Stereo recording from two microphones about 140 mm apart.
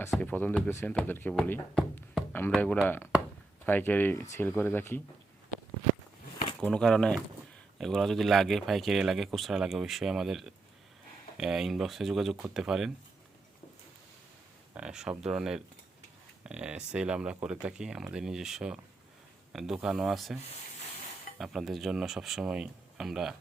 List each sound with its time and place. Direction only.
0.2 s speech: 10° left (ahead or behind)
1.3 s music: 5° left (ahead or behind)
2.5 s speech: 10° left (ahead or behind)
6.6 s speech: 5° left (ahead or behind)
14.8 s speech: 5° right (ahead or behind)
21.3 s speech: centre (ahead or behind)